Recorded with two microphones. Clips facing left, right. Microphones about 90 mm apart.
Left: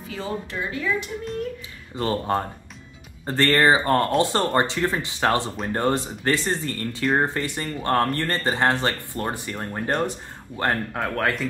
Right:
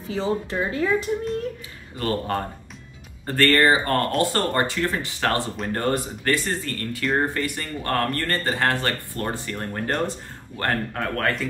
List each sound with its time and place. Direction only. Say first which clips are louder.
0.1 s speech: right 5 dB; 30° right (ahead or behind)
2.0 s speech: left 2 dB; 20° left (ahead or behind)